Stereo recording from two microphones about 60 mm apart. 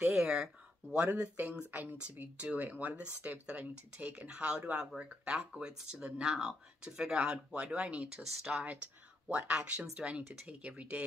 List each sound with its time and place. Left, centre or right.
0.1 s speech: centre
0.9 s speech: right
5.3 s speech: centre
8.1 s speech: centre
9.3 s speech: right
9.6 s speech: centre